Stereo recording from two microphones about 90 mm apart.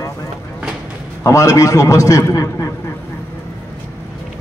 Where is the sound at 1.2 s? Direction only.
35° left (ahead or behind).